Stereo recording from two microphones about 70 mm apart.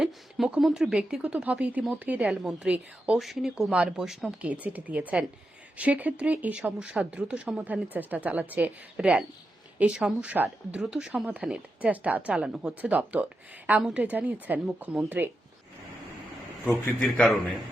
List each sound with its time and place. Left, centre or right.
0.0 s a sound: centre
0.6 s speech: centre
1.2 s speech: centre
3.2 s speech: centre
4.4 s speech: centre
17.0 s a man's voice: centre